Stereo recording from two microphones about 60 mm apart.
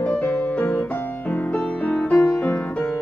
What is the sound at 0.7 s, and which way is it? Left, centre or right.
Music, left.